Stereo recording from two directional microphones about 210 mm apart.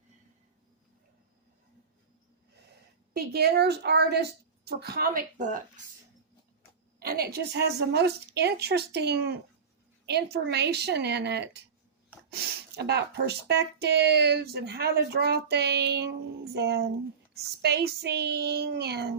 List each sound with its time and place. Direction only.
3.1 s speech: 50° right (ahead or behind)
7.0 s speech: 45° right (ahead or behind)
10.3 s speech: 55° right (ahead or behind)